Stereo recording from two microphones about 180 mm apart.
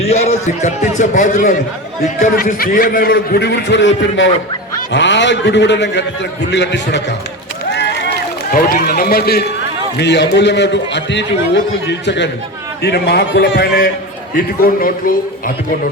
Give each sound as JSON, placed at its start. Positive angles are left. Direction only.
{"t": 0.0, "sound": "a man's voice", "side_deg": 35}
{"t": 4.9, "sound": "a man's voice", "side_deg": 80}
{"t": 8.4, "sound": "a man's voice", "side_deg": 50}
{"t": 10.0, "sound": "a man's voice", "side_deg": 70}
{"t": 14.3, "sound": "a man's voice", "side_deg": 55}